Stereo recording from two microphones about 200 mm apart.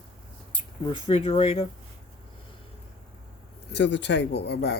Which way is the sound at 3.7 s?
60° left (ahead or behind).